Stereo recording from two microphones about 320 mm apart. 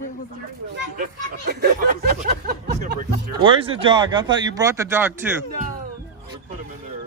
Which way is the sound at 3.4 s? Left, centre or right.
Centre.